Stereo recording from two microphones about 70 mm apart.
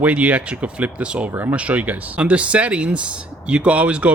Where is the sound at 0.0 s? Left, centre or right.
Right.